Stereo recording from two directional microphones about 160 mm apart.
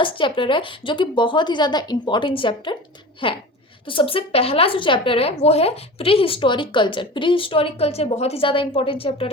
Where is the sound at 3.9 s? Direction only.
35° left (ahead or behind).